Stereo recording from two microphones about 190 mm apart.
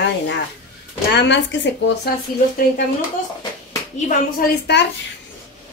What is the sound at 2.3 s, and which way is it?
Speech, 45° left (ahead or behind).